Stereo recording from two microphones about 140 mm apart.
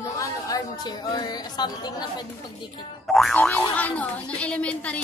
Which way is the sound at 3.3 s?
10° left (ahead or behind).